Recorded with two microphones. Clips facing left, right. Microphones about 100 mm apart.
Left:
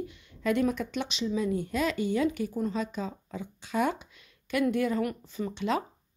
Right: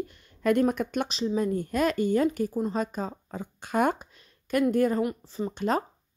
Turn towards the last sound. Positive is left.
turn(degrees=-45)  # may be behind; listen again after turning